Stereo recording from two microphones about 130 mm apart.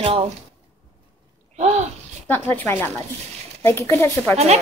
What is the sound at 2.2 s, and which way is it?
A woman's voice, 15° left (ahead or behind).